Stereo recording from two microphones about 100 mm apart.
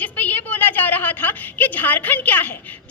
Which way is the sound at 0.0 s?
15° left (ahead or behind).